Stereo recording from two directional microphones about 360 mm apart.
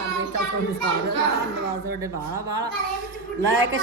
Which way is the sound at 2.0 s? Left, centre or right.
Centre.